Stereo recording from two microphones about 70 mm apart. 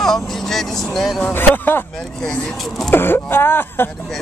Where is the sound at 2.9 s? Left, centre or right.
Left.